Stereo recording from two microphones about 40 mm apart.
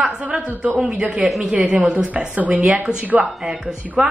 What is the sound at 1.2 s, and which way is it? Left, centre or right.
Speech, centre.